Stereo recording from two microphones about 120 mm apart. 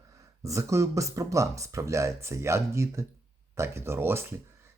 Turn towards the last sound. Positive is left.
turn(degrees=-20)  # may be behind; listen again after turning